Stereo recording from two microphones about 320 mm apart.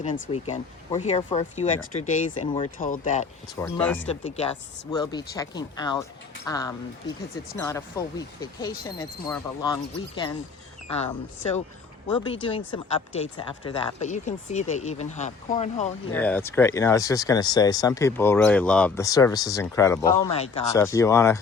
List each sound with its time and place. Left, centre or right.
0.0 s speech: left
3.5 s speech: centre
4.1 s speech: centre
16.1 s speech: centre